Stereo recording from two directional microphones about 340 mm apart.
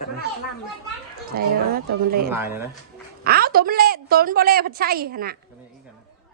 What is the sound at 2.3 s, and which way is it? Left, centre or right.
Speech, centre.